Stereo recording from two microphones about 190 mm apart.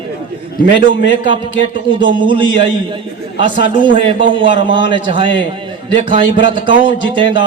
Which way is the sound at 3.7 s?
25° right (ahead or behind).